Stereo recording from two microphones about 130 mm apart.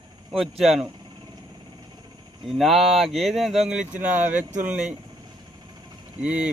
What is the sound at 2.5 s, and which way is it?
Speech, centre (ahead or behind).